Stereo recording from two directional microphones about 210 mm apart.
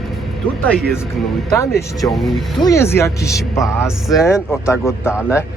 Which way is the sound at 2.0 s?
Centre (ahead or behind).